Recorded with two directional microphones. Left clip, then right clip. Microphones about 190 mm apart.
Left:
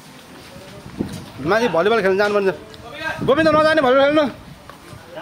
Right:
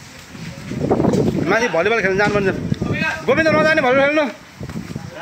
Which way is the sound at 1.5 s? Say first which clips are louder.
Left 2 dB; 10° left (ahead or behind).